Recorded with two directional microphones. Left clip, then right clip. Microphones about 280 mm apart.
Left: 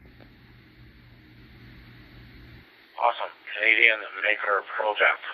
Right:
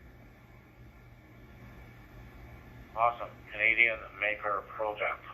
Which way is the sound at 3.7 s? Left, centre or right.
Centre.